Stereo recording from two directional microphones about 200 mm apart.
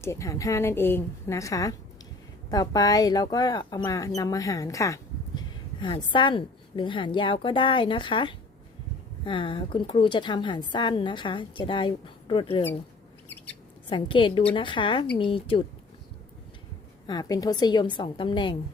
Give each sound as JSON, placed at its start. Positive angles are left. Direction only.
{"t": 0.0, "sound": "a woman's voice", "side_deg": 15}
{"t": 13.9, "sound": "speech", "side_deg": 25}
{"t": 17.1, "sound": "speech", "side_deg": 20}